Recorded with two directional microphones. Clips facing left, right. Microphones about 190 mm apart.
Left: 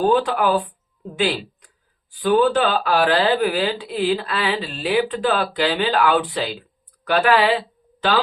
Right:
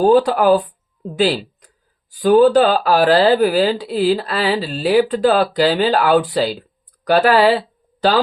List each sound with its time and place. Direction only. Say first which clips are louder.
0.0 s speech: right 5 dB; 40° right (ahead or behind)